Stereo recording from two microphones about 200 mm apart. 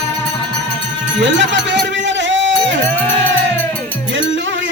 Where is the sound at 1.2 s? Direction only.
60° right (ahead or behind).